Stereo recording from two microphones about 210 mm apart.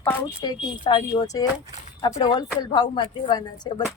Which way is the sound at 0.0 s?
10° left (ahead or behind).